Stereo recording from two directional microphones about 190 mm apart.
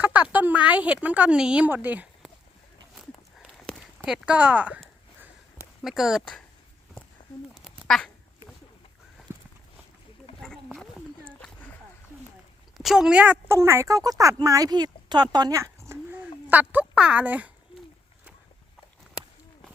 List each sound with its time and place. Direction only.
0.1 s speech: 5° right (ahead or behind)
2.9 s a sound: centre (ahead or behind)
5.8 s speech: centre (ahead or behind)
7.5 s quack: centre (ahead or behind)
9.3 s walk: 10° right (ahead or behind)
10.4 s a sound: 5° left (ahead or behind)
12.7 s speech: centre (ahead or behind)